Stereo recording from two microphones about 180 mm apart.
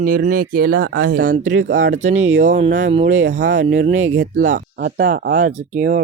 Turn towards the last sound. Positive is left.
turn(degrees=-40)  # may be behind; listen again after turning